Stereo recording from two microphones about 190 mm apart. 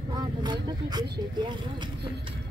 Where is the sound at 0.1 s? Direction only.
20° right (ahead or behind).